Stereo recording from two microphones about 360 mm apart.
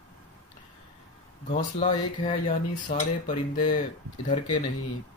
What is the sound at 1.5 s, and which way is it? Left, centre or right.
Speech, centre.